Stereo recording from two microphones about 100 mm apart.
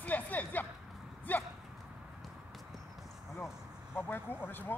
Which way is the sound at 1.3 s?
15° left (ahead or behind).